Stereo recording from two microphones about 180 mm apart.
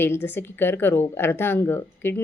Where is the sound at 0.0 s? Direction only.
10° left (ahead or behind).